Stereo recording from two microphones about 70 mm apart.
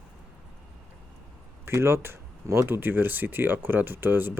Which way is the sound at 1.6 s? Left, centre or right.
Right.